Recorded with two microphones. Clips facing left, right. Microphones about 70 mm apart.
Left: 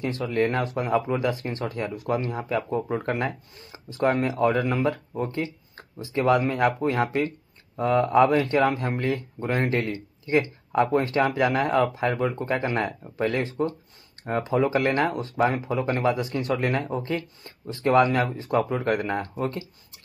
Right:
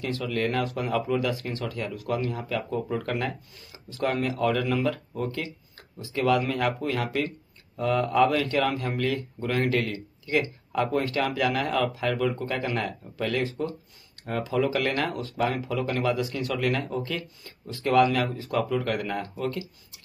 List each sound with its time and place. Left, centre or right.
0.0 s speech: left